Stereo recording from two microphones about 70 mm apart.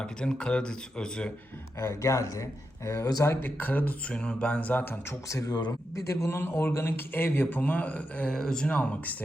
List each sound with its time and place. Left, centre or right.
0.0 s speech: centre
1.8 s speech: left
3.2 s a man's voice: left
4.1 s speech: centre
5.5 s speech: left
6.1 s a man's voice: left; by 9.1 s centre